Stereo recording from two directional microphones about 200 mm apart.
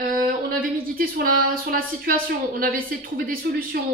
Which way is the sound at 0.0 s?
45° right (ahead or behind).